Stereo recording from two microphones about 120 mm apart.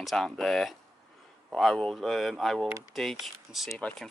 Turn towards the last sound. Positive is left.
turn(degrees=0)  # may be behind; listen again after turning